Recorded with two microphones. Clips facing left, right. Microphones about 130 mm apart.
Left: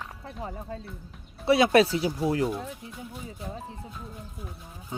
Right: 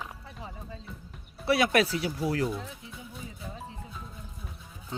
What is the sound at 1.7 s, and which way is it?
Speech, 25° left (ahead or behind).